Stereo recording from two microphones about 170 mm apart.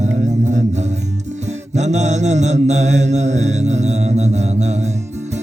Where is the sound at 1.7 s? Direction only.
40° right (ahead or behind).